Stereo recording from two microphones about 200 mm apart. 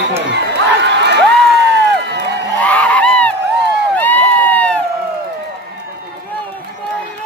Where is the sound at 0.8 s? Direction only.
60° right (ahead or behind).